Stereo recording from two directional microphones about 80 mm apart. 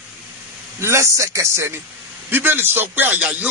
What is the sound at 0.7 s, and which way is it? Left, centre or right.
A man's voice, right.